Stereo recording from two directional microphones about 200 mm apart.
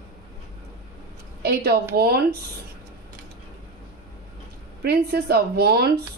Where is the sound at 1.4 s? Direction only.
50° right (ahead or behind).